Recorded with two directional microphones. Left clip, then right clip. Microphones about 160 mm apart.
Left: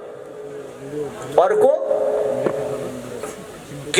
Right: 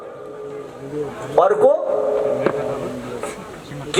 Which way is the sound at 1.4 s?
25° left (ahead or behind).